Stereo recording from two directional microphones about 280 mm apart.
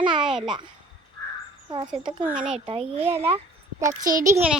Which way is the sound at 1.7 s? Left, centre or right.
Centre.